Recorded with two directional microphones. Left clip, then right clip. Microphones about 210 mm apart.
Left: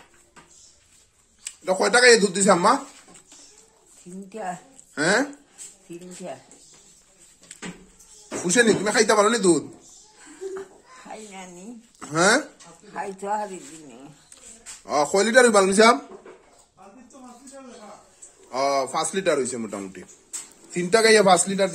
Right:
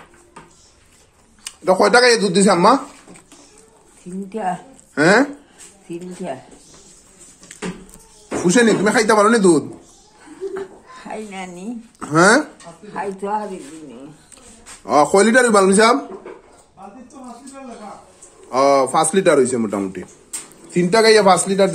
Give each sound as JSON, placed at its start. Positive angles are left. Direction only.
{"t": 1.4, "sound": "speech", "side_deg": -15}
{"t": 4.3, "sound": "speech", "side_deg": 15}
{"t": 4.9, "sound": "speech", "side_deg": -5}
{"t": 5.9, "sound": "speech", "side_deg": 5}
{"t": 8.4, "sound": "speech", "side_deg": -5}
{"t": 12.9, "sound": "speech", "side_deg": 35}
{"t": 14.9, "sound": "speech", "side_deg": -10}
{"t": 18.5, "sound": "speech", "side_deg": -10}